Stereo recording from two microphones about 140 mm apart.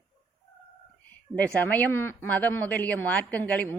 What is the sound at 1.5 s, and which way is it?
A woman's voice, 10° left (ahead or behind).